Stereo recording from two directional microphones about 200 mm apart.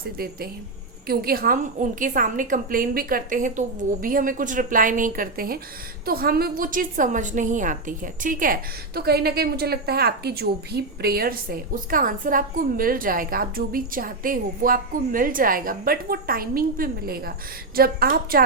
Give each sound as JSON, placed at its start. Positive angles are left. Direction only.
{"t": 1.0, "sound": "a woman's voice", "side_deg": -50}